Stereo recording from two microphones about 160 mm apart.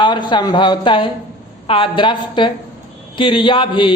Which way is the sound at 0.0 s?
30° left (ahead or behind).